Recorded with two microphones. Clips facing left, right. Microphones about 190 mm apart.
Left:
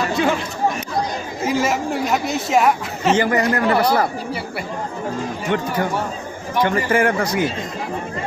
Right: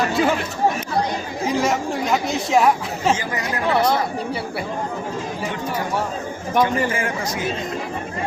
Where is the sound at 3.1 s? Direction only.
65° left (ahead or behind).